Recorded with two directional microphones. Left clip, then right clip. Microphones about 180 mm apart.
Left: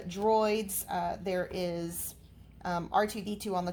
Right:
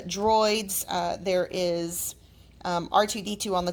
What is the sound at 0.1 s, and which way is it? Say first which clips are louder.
Speech: right 5 dB; 30° right (ahead or behind).